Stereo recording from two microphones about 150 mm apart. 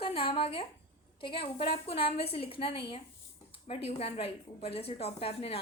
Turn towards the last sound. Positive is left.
turn(degrees=40)  # may be behind; listen again after turning